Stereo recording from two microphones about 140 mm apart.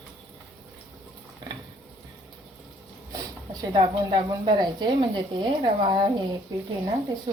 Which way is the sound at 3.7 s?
40° right (ahead or behind).